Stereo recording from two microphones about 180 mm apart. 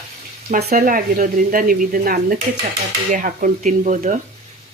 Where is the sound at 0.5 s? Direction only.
50° right (ahead or behind).